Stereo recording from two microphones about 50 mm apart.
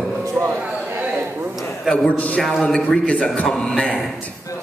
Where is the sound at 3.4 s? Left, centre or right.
Centre.